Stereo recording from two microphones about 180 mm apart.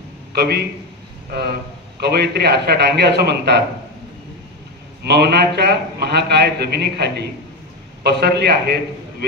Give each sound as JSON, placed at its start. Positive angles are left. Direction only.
{"t": 0.3, "sound": "a man's voice", "side_deg": -65}
{"t": 2.0, "sound": "a man's voice", "side_deg": -65}
{"t": 5.0, "sound": "a man's voice", "side_deg": -65}